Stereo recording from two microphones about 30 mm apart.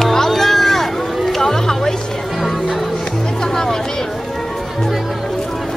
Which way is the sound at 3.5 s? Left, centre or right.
Centre.